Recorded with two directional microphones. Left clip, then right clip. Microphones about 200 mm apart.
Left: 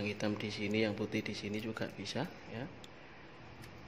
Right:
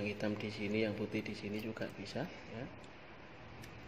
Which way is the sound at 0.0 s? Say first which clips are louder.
Left 2 dB; 15° left (ahead or behind).